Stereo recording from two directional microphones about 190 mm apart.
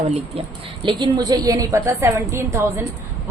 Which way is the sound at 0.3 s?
25° right (ahead or behind).